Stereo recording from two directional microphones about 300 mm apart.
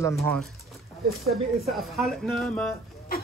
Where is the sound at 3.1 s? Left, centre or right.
Left.